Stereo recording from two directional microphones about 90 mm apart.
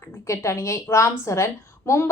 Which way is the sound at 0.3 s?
35° left (ahead or behind).